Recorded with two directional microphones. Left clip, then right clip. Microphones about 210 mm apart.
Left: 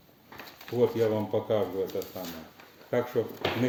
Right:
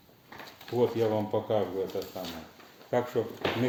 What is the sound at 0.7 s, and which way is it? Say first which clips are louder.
Speech: left 1 dB; 10° left (ahead or behind).